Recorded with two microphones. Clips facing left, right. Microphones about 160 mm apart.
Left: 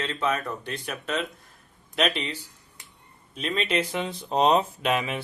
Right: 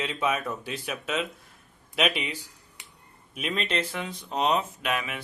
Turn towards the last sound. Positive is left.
turn(degrees=30)  # may be behind; listen again after turning